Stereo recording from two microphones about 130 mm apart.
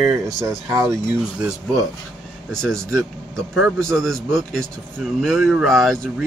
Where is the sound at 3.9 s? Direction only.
Centre (ahead or behind).